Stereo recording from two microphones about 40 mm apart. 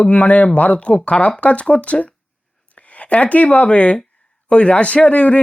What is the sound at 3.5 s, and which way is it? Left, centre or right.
Speech, left.